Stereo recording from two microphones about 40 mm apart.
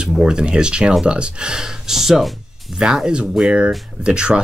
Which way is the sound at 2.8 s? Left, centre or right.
Centre.